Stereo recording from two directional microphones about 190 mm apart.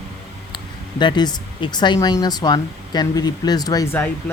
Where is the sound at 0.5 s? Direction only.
25° left (ahead or behind).